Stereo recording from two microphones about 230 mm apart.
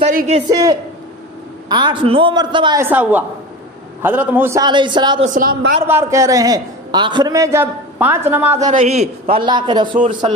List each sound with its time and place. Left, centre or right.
0.0 s a man's voice: right
0.5 s a man's voice: centre
5.3 s a man's voice: right
5.9 s a man's voice: centre
8.6 s a man's voice: right